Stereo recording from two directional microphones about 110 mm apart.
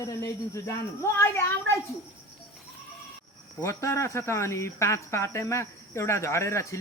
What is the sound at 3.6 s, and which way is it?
Speech, 25° left (ahead or behind).